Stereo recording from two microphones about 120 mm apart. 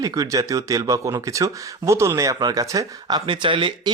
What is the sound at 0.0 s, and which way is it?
Speech, 30° right (ahead or behind).